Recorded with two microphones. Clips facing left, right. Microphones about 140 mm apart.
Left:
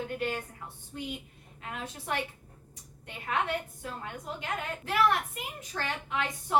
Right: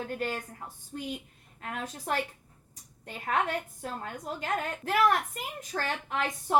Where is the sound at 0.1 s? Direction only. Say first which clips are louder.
Even; 40° right (ahead or behind).